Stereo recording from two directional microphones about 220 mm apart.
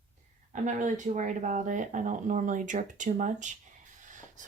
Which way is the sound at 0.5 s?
35° right (ahead or behind).